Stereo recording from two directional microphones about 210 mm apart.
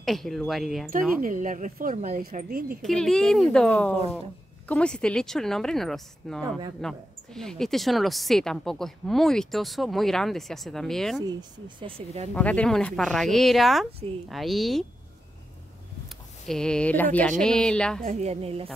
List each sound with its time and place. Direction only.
0.0 s a woman's voice: centre (ahead or behind)
1.2 s speech: 40° right (ahead or behind)
2.8 s a woman's voice: centre (ahead or behind)
11.2 s speech: 25° right (ahead or behind)
12.4 s a woman's voice: 5° left (ahead or behind)
16.4 s a woman's voice: 5° left (ahead or behind)
18.0 s speech: 30° right (ahead or behind)